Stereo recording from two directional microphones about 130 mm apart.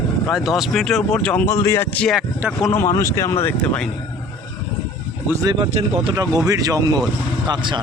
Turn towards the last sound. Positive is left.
turn(degrees=-30)  # may be behind; listen again after turning